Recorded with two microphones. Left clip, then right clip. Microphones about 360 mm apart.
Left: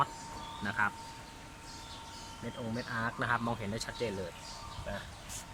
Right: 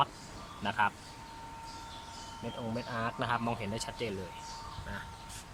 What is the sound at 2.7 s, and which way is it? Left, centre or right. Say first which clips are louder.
Speech: left 1 dB; centre.